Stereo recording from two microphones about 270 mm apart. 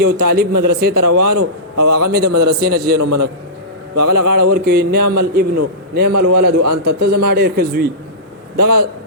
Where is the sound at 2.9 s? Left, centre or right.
Right.